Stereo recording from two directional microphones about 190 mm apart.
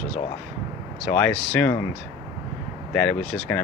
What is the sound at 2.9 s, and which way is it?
Speech, 5° left (ahead or behind).